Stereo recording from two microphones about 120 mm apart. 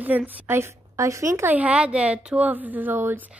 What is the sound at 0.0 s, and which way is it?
Speech, 10° right (ahead or behind).